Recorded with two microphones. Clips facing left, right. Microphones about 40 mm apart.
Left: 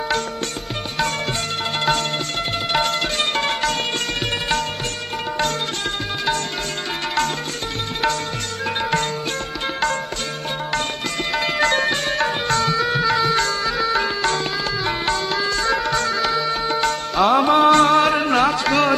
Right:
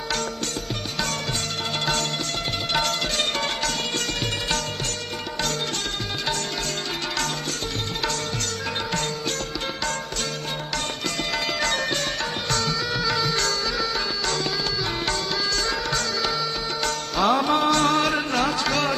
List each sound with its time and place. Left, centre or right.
3.3 s music: left
11.3 s sitar: left
14.8 s music: left